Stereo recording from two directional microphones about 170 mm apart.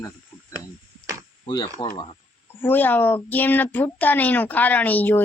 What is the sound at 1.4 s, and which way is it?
Speech, 30° left (ahead or behind).